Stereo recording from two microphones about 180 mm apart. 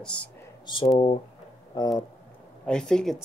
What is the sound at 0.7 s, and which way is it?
Speech, 25° left (ahead or behind).